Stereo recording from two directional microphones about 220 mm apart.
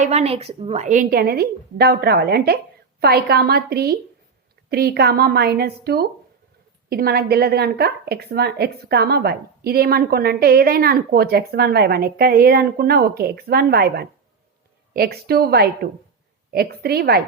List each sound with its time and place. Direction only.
0.0 s a woman's voice: 30° right (ahead or behind); by 17.2 s 45° right (ahead or behind)